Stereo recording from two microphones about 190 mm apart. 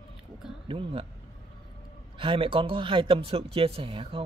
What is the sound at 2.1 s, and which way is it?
A man's voice, 25° right (ahead or behind).